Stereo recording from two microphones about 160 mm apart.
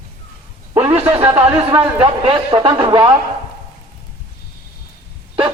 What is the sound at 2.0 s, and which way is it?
A man's voice, 35° right (ahead or behind).